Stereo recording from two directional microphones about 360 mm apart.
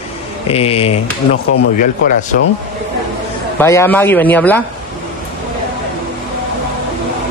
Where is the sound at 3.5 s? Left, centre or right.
Centre.